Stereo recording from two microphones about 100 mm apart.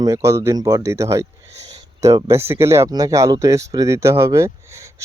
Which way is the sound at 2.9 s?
40° right (ahead or behind).